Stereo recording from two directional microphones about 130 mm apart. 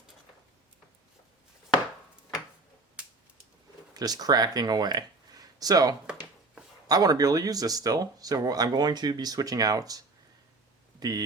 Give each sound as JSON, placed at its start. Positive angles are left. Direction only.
{"t": 3.9, "sound": "speech", "side_deg": -30}